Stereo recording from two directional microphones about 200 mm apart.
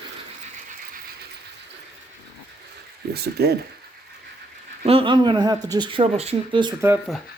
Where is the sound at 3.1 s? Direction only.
55° right (ahead or behind).